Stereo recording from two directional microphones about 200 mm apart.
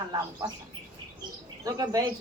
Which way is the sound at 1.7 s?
20° right (ahead or behind).